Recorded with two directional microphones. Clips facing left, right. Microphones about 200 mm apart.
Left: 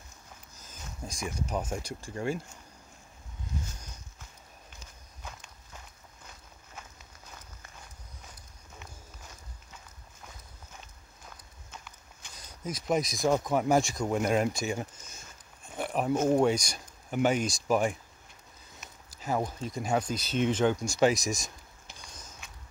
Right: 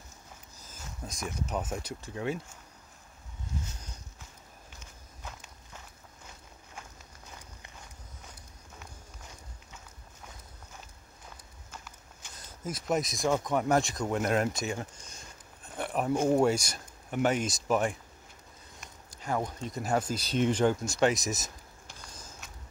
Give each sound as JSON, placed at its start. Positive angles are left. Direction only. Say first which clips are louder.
{"t": 1.0, "sound": "speech", "louder": "left 1 dB", "side_deg": 0}
{"t": 11.2, "sound": "walk", "louder": "even", "side_deg": -5}
{"t": 12.4, "sound": "speech", "louder": "even", "side_deg": 0}
{"t": 14.7, "sound": "a sound", "louder": "left 2 dB", "side_deg": 10}
{"t": 16.3, "sound": "speech", "louder": "even", "side_deg": -5}